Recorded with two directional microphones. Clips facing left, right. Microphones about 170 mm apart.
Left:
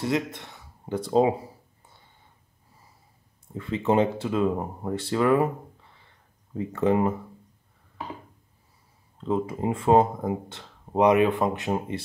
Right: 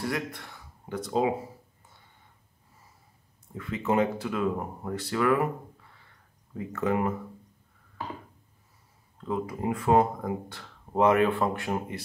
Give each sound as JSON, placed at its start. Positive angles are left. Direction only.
{"t": 0.0, "sound": "speech", "side_deg": 20}
{"t": 3.5, "sound": "speech", "side_deg": 30}
{"t": 6.5, "sound": "speech", "side_deg": 25}
{"t": 9.2, "sound": "speech", "side_deg": 25}